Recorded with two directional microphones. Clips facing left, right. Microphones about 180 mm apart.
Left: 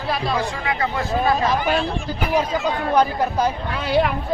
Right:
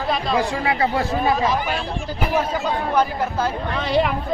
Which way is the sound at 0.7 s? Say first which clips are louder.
Right 3 dB; 30° right (ahead or behind).